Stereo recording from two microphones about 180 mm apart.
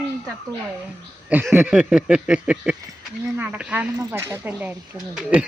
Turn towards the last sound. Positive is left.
turn(degrees=-5)  # may be behind; listen again after turning